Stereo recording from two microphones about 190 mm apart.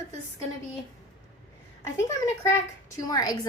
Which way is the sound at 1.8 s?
15° left (ahead or behind).